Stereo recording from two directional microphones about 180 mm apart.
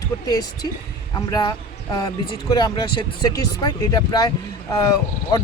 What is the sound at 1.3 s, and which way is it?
Speech, 20° left (ahead or behind).